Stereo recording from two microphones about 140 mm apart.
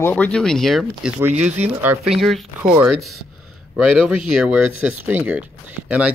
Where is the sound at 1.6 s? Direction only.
15° right (ahead or behind).